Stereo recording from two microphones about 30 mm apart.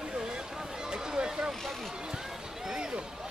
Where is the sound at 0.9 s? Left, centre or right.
Right.